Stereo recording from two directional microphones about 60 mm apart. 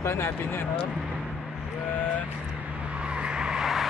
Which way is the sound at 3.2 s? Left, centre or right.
Centre.